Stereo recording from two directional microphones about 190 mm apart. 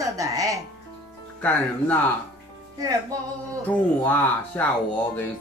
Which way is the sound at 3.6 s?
10° left (ahead or behind).